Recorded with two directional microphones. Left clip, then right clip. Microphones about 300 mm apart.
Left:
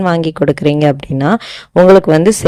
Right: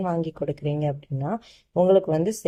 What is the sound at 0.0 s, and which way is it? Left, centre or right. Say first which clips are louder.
Speech: left 14 dB; left.